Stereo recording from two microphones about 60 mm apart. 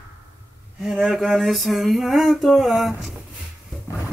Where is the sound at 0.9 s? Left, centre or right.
Centre.